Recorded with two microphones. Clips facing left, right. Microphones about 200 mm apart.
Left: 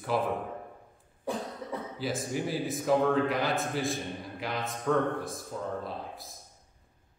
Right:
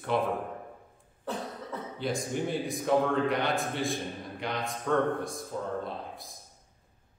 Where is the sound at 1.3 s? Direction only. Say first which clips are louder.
Left 2 dB; 15° left (ahead or behind).